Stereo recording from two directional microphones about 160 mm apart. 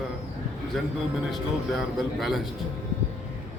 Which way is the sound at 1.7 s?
Centre (ahead or behind).